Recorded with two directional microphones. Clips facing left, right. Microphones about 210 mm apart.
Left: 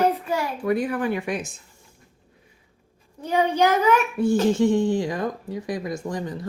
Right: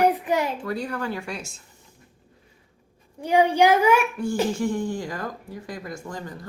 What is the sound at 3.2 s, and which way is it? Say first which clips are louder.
Speech: right 2 dB; 15° right (ahead or behind).